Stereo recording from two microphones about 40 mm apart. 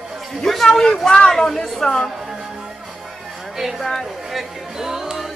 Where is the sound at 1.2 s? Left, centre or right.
Centre.